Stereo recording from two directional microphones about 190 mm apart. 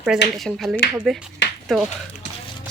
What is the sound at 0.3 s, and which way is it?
Speech, centre (ahead or behind).